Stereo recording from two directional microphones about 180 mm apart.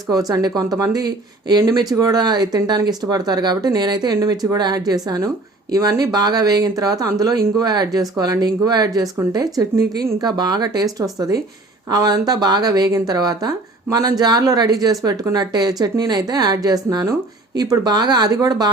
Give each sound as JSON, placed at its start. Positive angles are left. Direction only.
{"t": 0.1, "sound": "speech", "side_deg": -20}